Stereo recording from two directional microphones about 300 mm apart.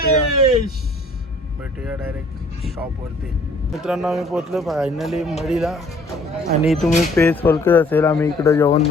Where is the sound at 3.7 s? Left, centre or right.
Centre.